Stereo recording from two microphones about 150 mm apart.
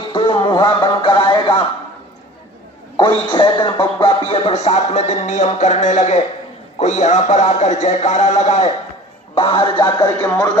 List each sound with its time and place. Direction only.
0.1 s music: 35° left (ahead or behind)
3.0 s speech: 35° left (ahead or behind)
4.0 s music: 40° left (ahead or behind)
9.3 s speech: 35° left (ahead or behind)